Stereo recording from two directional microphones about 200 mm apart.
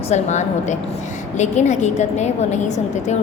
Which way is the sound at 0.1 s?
35° left (ahead or behind).